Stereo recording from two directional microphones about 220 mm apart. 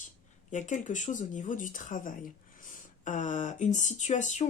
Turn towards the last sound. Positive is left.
turn(degrees=35)  # may be behind; listen again after turning